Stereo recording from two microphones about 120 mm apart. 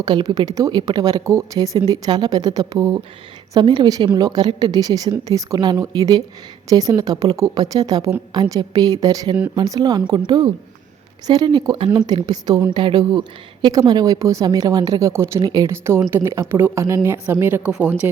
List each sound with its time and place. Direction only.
0.0 s a woman's voice: 40° right (ahead or behind); by 17.9 s 10° right (ahead or behind)